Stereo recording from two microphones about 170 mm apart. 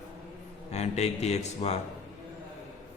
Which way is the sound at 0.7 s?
40° left (ahead or behind).